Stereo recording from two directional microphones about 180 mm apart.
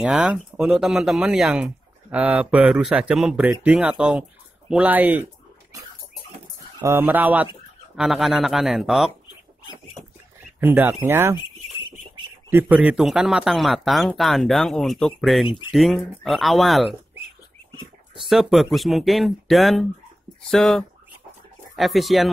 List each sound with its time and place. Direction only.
0.0 s speech: 5° right (ahead or behind)
4.0 s a sound: 5° right (ahead or behind)
6.8 s speech: 15° right (ahead or behind)
10.6 s speech: 10° right (ahead or behind)
12.4 s speech: 10° right (ahead or behind)
18.3 s speech: centre (ahead or behind)